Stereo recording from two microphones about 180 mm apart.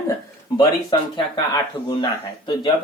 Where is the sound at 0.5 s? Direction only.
25° left (ahead or behind).